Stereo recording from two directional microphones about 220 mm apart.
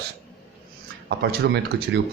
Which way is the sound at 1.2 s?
50° right (ahead or behind).